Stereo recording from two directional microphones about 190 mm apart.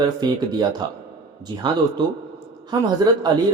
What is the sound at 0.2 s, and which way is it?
Speech, 20° right (ahead or behind).